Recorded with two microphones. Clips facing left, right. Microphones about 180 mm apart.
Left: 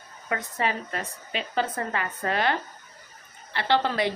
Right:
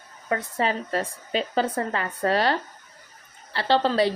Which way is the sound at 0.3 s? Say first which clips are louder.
Right 3 dB; 30° right (ahead or behind).